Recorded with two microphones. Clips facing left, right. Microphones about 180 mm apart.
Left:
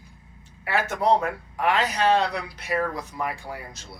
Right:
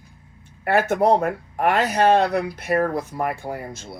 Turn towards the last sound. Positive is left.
turn(degrees=-50)  # may be behind; listen again after turning